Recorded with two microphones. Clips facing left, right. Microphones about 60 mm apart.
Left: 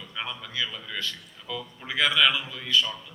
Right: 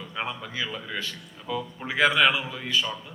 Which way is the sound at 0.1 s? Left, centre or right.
Right.